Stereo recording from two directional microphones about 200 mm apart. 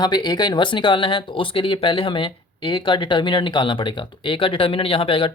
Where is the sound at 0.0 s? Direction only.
20° left (ahead or behind).